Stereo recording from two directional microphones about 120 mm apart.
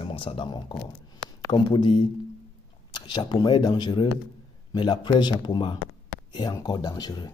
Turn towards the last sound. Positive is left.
turn(degrees=35)  # may be behind; listen again after turning